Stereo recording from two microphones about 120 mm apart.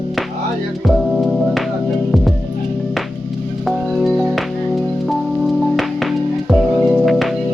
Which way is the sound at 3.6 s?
Centre (ahead or behind).